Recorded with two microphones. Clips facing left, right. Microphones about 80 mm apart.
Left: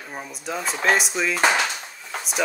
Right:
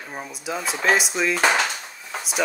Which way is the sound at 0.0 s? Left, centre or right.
Centre.